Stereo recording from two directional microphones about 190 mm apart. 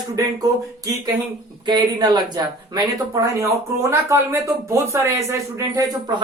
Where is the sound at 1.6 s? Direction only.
25° right (ahead or behind).